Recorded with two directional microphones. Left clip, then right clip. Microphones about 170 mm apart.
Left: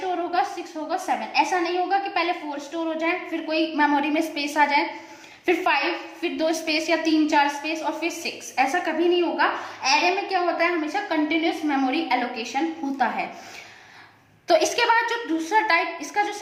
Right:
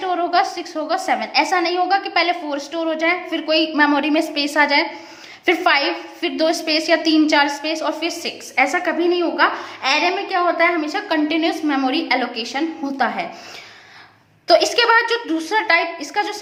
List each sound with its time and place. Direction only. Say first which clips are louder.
0.1 s a woman's voice: right 7 dB; 55° right (ahead or behind)
14.4 s a woman's voice: right 5 dB; 30° right (ahead or behind)